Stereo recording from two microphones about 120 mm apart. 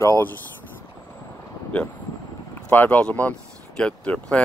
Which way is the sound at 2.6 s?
15° left (ahead or behind).